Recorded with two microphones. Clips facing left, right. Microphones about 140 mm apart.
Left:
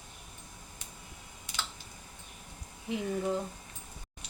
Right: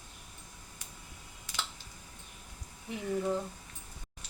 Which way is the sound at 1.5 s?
20° left (ahead or behind).